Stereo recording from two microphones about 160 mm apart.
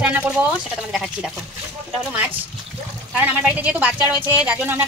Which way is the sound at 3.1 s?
10° right (ahead or behind).